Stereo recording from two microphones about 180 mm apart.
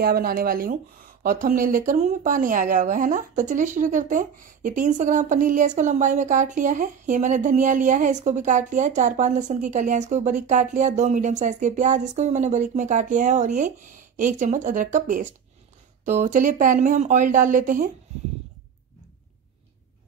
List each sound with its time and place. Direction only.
0.0 s speech: 55° right (ahead or behind)